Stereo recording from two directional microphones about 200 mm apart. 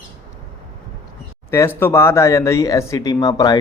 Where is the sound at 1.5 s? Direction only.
10° left (ahead or behind).